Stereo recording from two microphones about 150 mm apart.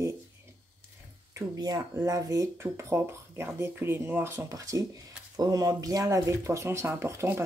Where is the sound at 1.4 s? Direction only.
25° right (ahead or behind).